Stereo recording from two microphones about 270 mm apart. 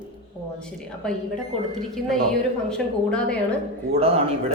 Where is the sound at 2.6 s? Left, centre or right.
Centre.